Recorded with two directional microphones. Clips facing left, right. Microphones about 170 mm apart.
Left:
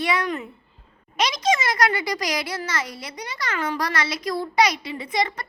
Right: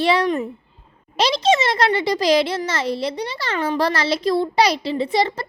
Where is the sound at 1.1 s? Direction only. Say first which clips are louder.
Right 5 dB; 30° right (ahead or behind).